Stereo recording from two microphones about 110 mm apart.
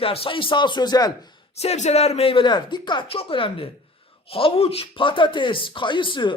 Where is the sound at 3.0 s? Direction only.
55° left (ahead or behind).